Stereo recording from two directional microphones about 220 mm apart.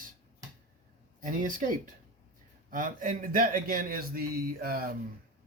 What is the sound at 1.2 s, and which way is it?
A man's voice, 40° right (ahead or behind).